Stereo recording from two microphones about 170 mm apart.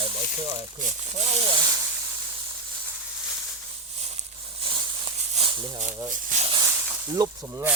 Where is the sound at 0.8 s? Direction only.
45° right (ahead or behind); by 1.8 s 25° right (ahead or behind).